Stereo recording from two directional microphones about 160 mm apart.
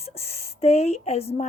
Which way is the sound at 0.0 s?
40° left (ahead or behind).